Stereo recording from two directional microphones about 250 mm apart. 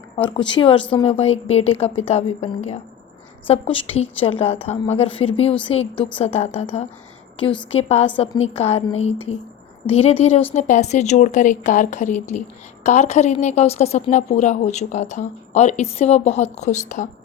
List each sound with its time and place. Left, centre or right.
0.2 s a woman's voice: centre